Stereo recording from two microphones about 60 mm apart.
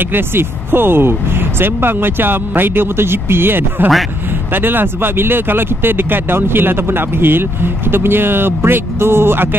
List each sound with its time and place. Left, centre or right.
0.1 s speech: right